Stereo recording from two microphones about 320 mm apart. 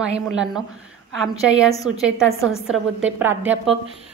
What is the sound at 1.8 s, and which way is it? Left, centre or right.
A woman's voice, centre.